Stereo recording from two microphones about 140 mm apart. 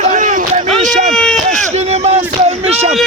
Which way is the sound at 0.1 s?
60° right (ahead or behind).